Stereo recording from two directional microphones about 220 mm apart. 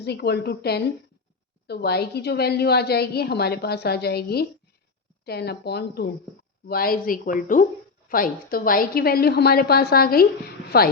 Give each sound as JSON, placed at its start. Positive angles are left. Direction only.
{"t": 0.0, "sound": "a woman's voice", "side_deg": 50}